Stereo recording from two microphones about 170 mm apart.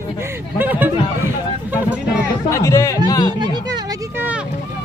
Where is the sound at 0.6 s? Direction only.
10° right (ahead or behind).